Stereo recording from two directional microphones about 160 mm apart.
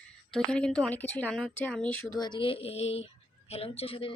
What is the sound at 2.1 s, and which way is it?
Speech, 25° left (ahead or behind).